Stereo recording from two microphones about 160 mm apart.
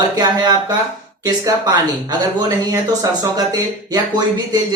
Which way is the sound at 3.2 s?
25° right (ahead or behind).